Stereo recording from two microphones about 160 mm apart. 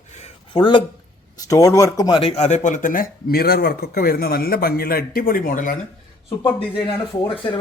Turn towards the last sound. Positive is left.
turn(degrees=35)  # may be behind; listen again after turning